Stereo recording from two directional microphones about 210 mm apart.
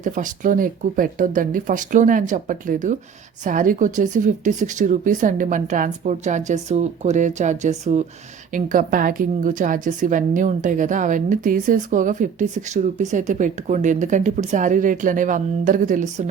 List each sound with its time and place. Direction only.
0.0 s a woman's voice: 40° right (ahead or behind)